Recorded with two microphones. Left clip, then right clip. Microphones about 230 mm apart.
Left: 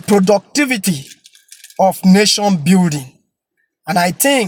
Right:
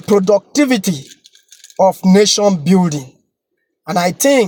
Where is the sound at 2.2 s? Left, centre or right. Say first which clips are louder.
Right 3 dB; centre.